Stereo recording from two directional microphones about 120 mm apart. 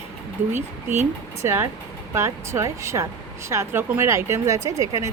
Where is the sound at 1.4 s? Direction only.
20° right (ahead or behind).